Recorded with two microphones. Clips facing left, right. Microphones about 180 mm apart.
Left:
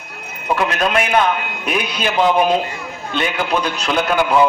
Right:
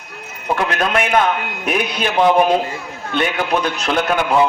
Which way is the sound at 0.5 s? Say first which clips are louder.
Left 1 dB; 50° right (ahead or behind).